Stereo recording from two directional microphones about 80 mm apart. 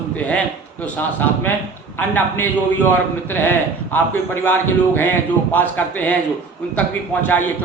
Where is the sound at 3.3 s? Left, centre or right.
Left.